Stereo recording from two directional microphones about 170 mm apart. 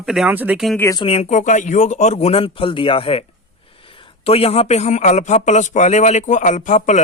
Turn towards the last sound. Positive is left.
turn(degrees=45)  # may be behind; listen again after turning